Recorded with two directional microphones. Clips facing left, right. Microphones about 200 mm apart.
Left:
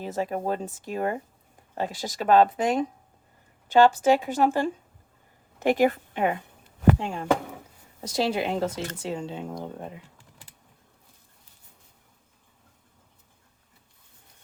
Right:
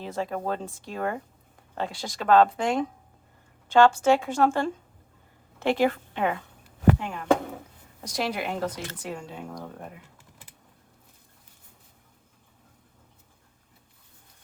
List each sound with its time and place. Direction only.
0.0 s a woman's voice: 15° left (ahead or behind)
7.0 s speech: 30° left (ahead or behind)